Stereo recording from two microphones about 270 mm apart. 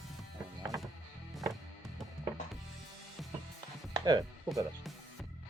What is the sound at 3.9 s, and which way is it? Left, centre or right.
Music, centre.